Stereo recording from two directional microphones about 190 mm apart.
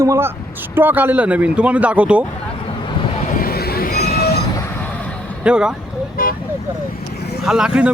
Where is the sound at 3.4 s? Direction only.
55° left (ahead or behind).